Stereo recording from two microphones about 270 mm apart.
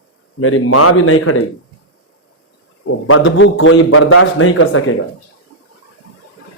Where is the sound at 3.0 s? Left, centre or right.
Left.